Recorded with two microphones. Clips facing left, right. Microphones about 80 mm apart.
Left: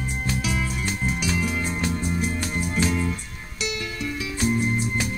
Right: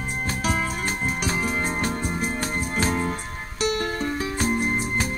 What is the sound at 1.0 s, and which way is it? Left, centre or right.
Music, right.